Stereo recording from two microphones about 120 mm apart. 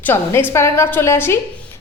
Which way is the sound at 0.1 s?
20° left (ahead or behind).